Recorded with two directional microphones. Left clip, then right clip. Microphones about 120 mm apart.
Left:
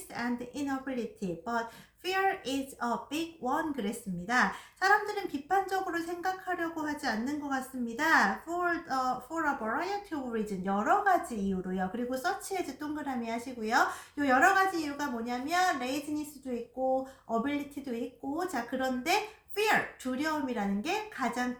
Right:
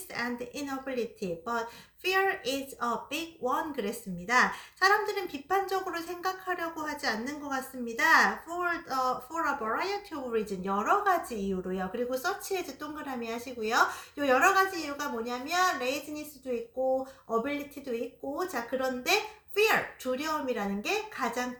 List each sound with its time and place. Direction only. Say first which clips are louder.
0.1 s a woman's voice: right 2 dB; 40° right (ahead or behind)
18.3 s a woman's voice: right 1 dB; 40° right (ahead or behind)